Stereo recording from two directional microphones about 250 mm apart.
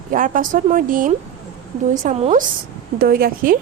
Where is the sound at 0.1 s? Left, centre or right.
Right.